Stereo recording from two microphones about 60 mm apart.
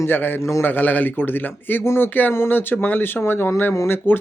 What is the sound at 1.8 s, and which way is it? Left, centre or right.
Speech, left.